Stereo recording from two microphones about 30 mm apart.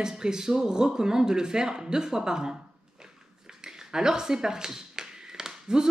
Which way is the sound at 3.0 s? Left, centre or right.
Right.